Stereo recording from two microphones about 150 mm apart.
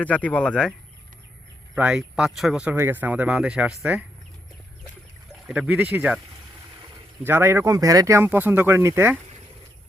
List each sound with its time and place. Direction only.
0.0 s speech: 10° left (ahead or behind)
1.7 s speech: 5° right (ahead or behind)
5.5 s speech: 10° right (ahead or behind)
7.3 s speech: 15° right (ahead or behind)